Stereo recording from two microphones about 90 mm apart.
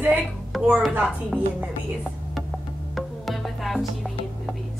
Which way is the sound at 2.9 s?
Centre (ahead or behind).